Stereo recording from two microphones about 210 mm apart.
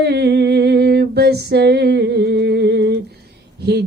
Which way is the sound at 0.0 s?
50° right (ahead or behind).